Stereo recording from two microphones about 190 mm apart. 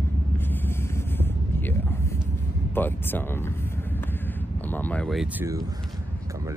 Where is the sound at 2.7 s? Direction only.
10° left (ahead or behind).